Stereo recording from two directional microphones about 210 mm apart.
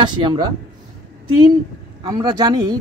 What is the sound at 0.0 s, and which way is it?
Speech, 20° right (ahead or behind).